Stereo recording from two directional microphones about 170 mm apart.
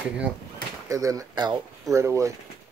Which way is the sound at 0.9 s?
20° right (ahead or behind).